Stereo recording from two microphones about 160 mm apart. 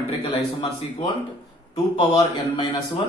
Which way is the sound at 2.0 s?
30° left (ahead or behind).